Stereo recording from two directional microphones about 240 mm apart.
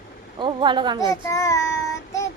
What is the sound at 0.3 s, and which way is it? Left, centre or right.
Speech, centre.